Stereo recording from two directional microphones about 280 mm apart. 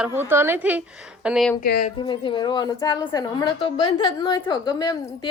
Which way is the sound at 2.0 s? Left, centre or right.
Centre.